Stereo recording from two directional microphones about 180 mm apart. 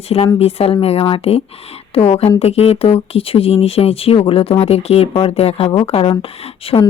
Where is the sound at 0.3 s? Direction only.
35° left (ahead or behind).